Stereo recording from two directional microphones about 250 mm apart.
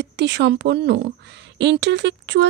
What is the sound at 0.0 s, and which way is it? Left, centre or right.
A woman's voice, right.